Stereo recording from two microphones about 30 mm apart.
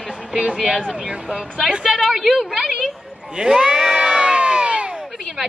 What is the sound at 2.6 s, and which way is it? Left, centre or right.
A woman's voice, centre.